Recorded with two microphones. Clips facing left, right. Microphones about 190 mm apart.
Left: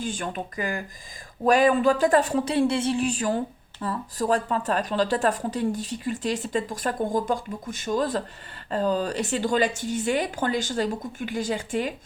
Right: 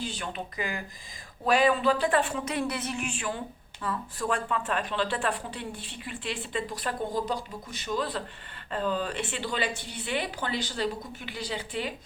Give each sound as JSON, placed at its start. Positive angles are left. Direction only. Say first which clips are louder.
{"t": 0.0, "sound": "a woman's voice", "louder": "left 5 dB", "side_deg": 50}